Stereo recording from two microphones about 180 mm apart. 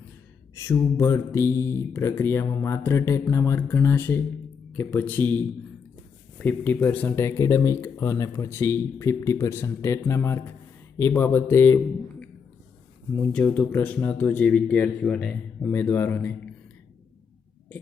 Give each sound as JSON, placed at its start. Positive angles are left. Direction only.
{"t": 0.5, "sound": "speech", "side_deg": 15}
{"t": 6.4, "sound": "speech", "side_deg": 10}
{"t": 13.1, "sound": "speech", "side_deg": 5}